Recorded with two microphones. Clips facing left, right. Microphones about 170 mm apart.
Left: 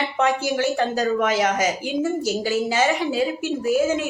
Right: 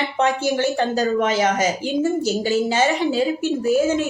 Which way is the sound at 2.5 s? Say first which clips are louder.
Right 3 dB; 25° right (ahead or behind).